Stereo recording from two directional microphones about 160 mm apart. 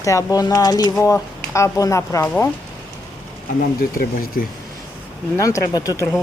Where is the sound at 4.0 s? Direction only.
65° left (ahead or behind).